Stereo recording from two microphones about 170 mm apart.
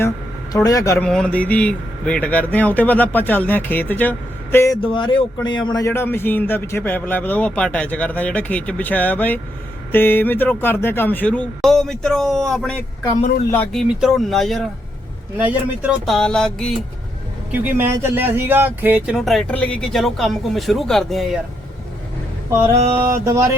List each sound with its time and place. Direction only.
0.5 s speech: 20° left (ahead or behind)
0.9 s speech: 5° left (ahead or behind)
4.8 s speech: 30° left (ahead or behind); by 12.7 s centre (ahead or behind)
13.7 s speech: centre (ahead or behind)
15.4 s speech: 10° right (ahead or behind)
16.1 s speech: 5° left (ahead or behind)
17.5 s speech: 10° right (ahead or behind)
22.4 s mantra: 15° right (ahead or behind)
23.1 s speech: 20° right (ahead or behind)